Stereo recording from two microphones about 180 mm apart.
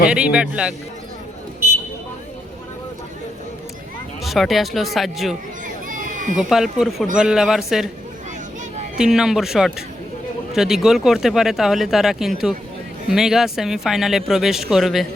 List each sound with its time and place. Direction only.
0.1 s speech: 5° right (ahead or behind)
4.2 s speech: centre (ahead or behind)
5.6 s crowd: 45° right (ahead or behind)
6.3 s speech: centre (ahead or behind)
9.0 s speech: 5° right (ahead or behind)